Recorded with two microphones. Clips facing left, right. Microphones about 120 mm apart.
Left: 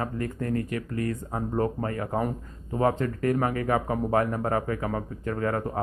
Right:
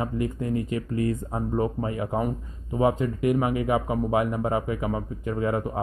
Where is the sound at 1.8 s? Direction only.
15° right (ahead or behind).